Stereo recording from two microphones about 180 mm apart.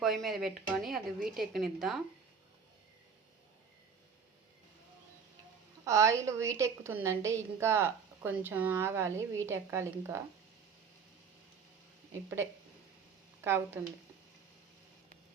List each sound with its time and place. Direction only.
0.0 s speech: centre (ahead or behind)
5.8 s a woman's voice: 15° right (ahead or behind)
13.4 s a woman's voice: 15° right (ahead or behind)